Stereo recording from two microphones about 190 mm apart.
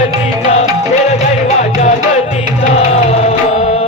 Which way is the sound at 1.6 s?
35° left (ahead or behind).